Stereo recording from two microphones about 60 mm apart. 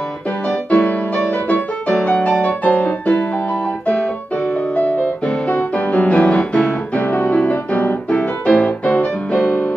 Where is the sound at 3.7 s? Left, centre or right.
Left.